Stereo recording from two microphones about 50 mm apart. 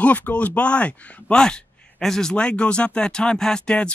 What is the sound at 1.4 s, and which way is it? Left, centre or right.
Speech, centre.